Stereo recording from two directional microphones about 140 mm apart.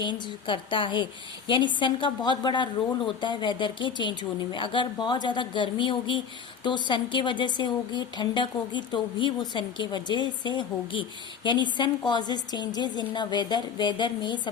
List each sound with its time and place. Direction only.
0.0 s speech: 35° left (ahead or behind)